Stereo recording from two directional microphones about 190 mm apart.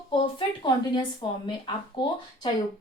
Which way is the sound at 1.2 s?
25° left (ahead or behind).